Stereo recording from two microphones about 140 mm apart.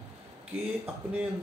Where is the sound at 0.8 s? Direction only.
15° right (ahead or behind).